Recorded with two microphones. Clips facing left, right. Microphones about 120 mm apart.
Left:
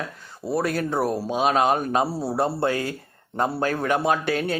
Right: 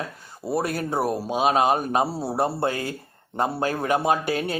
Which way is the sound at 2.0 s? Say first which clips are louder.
Left 1 dB; 25° right (ahead or behind).